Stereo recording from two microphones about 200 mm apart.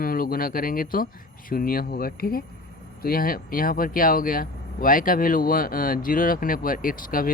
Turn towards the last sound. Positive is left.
turn(degrees=45)  # may be behind; listen again after turning